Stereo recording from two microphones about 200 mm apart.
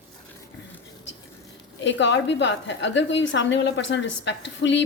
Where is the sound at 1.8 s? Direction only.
65° left (ahead or behind).